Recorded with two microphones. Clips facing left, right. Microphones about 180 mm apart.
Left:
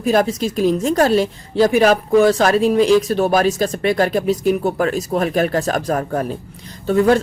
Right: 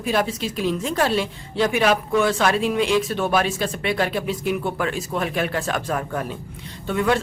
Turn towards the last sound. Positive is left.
turn(degrees=40)  # may be behind; listen again after turning